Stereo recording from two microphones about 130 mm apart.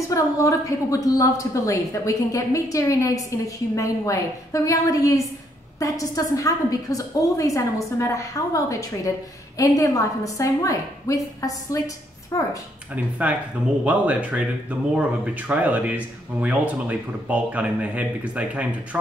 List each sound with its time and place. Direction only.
0.1 s a woman's voice: 25° left (ahead or behind)
12.9 s speech: 10° right (ahead or behind)